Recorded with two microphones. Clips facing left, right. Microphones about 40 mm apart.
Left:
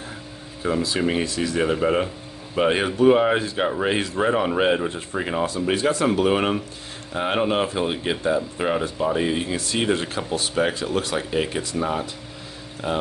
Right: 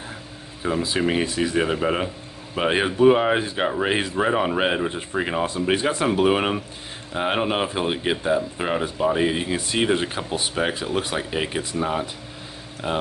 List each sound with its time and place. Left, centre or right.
0.8 s speech: centre
6.0 s speech: centre